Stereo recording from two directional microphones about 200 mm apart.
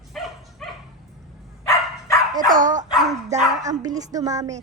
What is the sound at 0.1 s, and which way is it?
Dog, centre (ahead or behind).